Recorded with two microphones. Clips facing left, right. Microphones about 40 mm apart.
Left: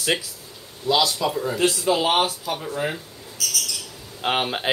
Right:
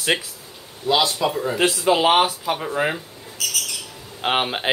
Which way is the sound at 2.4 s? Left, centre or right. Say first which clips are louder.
Right 4 dB; right.